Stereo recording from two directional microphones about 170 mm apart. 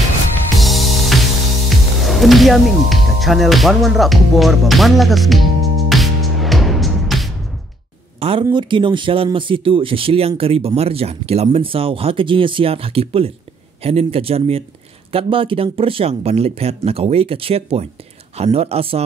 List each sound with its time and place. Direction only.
0.6 s music: centre (ahead or behind)
8.2 s speech: 35° right (ahead or behind)